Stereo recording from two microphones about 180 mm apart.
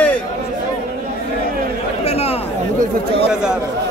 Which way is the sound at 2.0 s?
35° left (ahead or behind).